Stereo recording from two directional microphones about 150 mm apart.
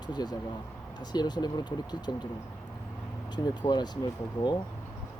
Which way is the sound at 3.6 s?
30° left (ahead or behind).